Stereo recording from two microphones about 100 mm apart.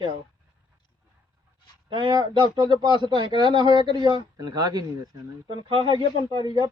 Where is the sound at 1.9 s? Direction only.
50° right (ahead or behind).